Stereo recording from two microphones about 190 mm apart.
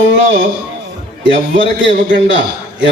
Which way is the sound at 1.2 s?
75° right (ahead or behind).